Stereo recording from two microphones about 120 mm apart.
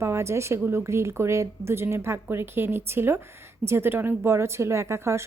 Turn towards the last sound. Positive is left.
turn(degrees=-25)  # may be behind; listen again after turning